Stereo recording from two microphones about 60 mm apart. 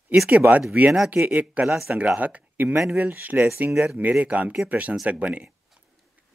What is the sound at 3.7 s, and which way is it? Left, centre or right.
Speech, centre.